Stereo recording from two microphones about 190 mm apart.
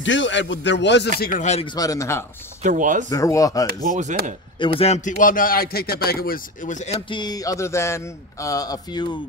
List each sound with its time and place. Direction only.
0.0 s speech: 75° left (ahead or behind)
1.2 s speech: 40° left (ahead or behind)
1.8 s speech: 15° left (ahead or behind)
2.6 s speech: 40° right (ahead or behind)
3.1 s speech: 15° left (ahead or behind)
3.6 s speech: 45° right (ahead or behind)
4.7 s a man's voice: 35° left (ahead or behind)
7.1 s speech: 20° left (ahead or behind)